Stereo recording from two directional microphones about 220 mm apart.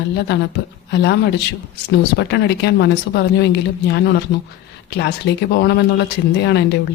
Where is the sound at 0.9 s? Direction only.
50° left (ahead or behind).